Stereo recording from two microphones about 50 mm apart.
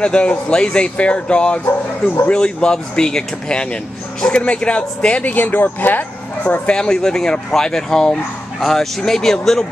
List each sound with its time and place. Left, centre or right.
0.0 s speech: left
5.3 s speech: left
6.4 s speech: left; by 9.7 s centre